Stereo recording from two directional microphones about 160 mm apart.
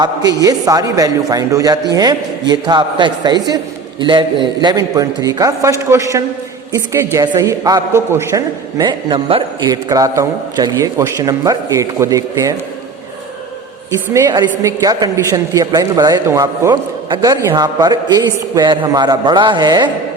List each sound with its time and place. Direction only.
0.0 s a woman's voice: 25° right (ahead or behind)
13.9 s a woman's voice: 20° right (ahead or behind)